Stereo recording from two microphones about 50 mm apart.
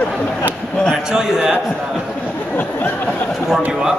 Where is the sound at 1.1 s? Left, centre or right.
Centre.